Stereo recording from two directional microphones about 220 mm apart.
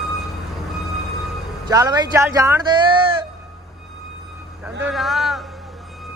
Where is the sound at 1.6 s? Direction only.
15° right (ahead or behind).